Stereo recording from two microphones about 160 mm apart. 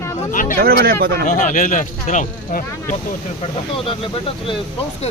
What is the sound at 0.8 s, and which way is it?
Speech, 65° right (ahead or behind).